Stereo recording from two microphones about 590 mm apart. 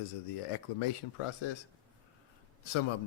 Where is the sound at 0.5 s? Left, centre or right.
Left.